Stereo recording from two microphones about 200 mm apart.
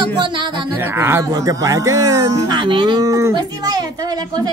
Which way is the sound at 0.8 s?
10° right (ahead or behind).